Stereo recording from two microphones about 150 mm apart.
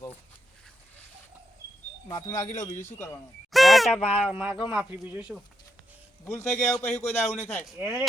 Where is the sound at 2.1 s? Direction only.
20° left (ahead or behind).